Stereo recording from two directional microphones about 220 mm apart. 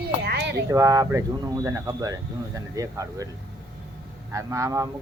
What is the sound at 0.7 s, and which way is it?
Speech, 15° right (ahead or behind).